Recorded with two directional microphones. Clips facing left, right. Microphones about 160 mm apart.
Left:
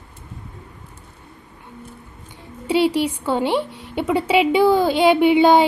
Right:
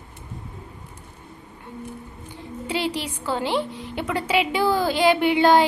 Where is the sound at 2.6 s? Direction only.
Centre (ahead or behind).